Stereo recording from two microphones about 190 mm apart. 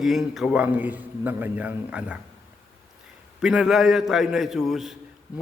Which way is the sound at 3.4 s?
5° right (ahead or behind).